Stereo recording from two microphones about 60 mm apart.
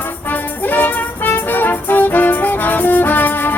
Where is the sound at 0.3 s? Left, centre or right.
Left.